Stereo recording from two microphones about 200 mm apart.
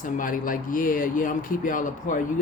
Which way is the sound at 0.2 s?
45° left (ahead or behind).